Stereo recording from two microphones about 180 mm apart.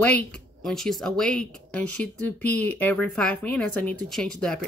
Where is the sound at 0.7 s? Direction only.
Centre (ahead or behind).